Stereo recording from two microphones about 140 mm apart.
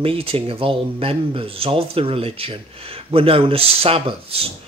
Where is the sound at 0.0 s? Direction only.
40° right (ahead or behind).